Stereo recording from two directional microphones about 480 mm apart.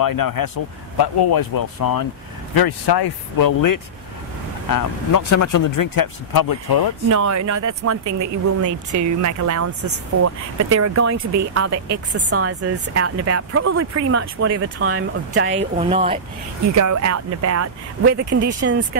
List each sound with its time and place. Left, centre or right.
0.0 s speech: left
7.1 s speech: right
15.5 s speech: centre
16.7 s speech: right